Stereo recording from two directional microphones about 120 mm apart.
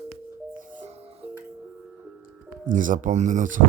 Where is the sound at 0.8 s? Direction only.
65° right (ahead or behind).